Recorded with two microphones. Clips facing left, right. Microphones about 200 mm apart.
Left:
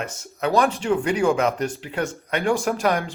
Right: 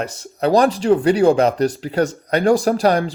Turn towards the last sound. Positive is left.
turn(degrees=-35)  # may be behind; listen again after turning